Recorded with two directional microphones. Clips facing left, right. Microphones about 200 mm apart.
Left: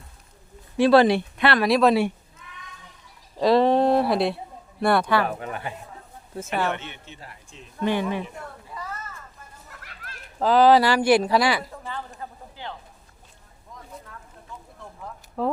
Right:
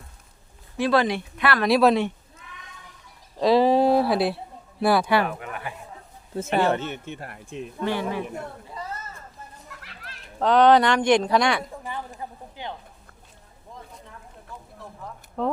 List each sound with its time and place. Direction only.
0.8 s speech: 30° left (ahead or behind)
1.6 s speech: centre (ahead or behind)
3.4 s speech: centre (ahead or behind)
5.2 s speech: 35° left (ahead or behind)
6.5 s speech: 30° right (ahead or behind); by 7.7 s 60° right (ahead or behind)
7.9 s speech: 20° left (ahead or behind)
8.7 s a sound: 25° right (ahead or behind)
10.4 s speech: 5° left (ahead or behind)
11.7 s speech: 15° right (ahead or behind)
12.2 s a sound: 15° right (ahead or behind)
15.4 s speech: 5° left (ahead or behind)